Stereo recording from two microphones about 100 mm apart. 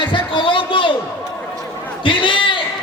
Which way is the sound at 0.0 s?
55° left (ahead or behind).